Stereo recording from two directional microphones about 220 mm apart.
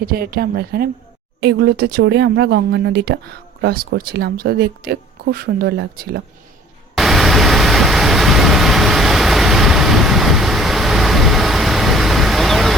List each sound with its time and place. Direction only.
0.0 s speech: 45° right (ahead or behind)
6.9 s vehicle: centre (ahead or behind)